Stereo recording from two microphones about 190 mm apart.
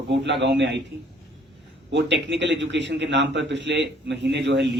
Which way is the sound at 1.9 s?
65° right (ahead or behind).